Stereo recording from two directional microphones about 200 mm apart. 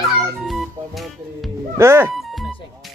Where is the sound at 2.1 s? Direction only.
Centre (ahead or behind).